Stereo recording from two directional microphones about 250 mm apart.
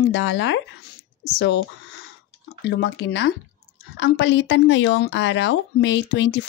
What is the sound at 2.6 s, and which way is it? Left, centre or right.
A woman's voice, left.